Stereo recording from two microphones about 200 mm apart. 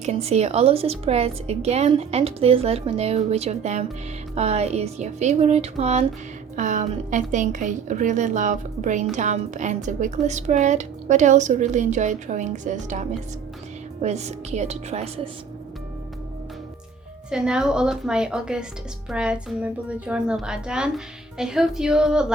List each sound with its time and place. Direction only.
0.0 s a woman's voice: 30° right (ahead or behind)
17.3 s a woman's voice: 5° right (ahead or behind)